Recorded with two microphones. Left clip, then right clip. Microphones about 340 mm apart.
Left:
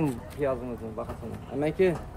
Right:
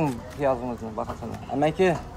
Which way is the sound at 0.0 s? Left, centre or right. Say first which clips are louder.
Right 4 dB; centre.